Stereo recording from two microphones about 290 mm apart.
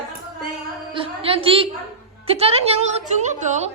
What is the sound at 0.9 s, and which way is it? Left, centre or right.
Speech, centre.